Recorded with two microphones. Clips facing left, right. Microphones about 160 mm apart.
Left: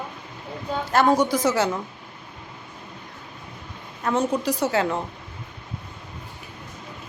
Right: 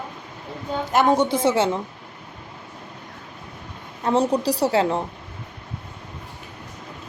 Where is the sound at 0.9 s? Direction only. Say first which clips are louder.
Right 1 dB; 20° right (ahead or behind).